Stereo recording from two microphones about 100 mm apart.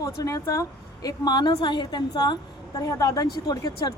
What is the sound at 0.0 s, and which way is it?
Speech, 35° left (ahead or behind).